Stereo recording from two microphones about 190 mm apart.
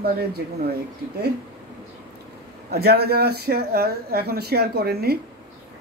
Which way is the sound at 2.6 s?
55° right (ahead or behind).